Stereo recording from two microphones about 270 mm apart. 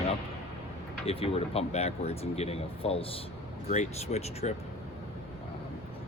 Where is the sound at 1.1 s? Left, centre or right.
Left.